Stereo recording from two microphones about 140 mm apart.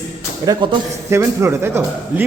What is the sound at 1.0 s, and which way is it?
Speech, 20° right (ahead or behind).